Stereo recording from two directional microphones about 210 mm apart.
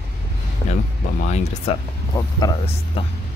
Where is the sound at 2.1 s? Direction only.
20° left (ahead or behind).